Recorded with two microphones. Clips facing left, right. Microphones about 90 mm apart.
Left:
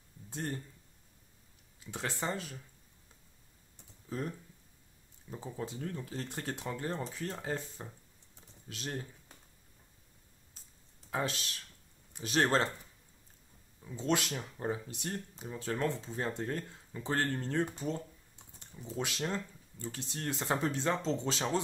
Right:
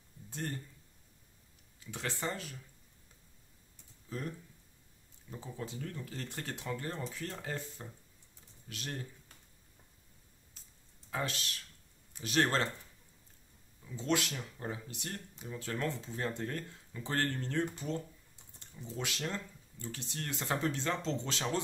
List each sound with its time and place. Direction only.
0.3 s speech: 25° left (ahead or behind)
1.9 s speech: 25° left (ahead or behind)
5.3 s speech: 25° left (ahead or behind)
11.1 s speech: 25° left (ahead or behind)
13.9 s speech: 25° left (ahead or behind)